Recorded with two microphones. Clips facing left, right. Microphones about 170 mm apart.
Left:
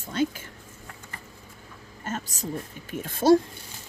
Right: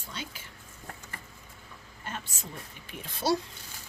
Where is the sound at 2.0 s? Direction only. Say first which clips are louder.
Left 8 dB; 40° left (ahead or behind).